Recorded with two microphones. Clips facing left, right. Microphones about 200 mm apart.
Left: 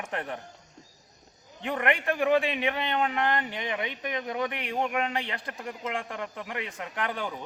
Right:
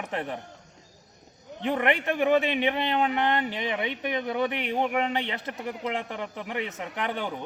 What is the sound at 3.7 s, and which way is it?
A man's voice, 5° right (ahead or behind).